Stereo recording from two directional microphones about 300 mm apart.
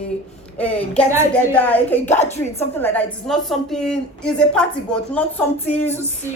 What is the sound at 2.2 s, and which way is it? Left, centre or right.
Speech, left.